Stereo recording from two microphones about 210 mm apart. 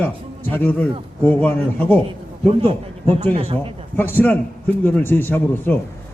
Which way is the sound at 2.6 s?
30° right (ahead or behind).